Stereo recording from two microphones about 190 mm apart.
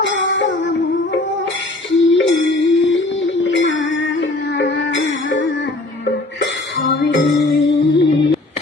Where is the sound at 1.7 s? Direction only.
75° left (ahead or behind).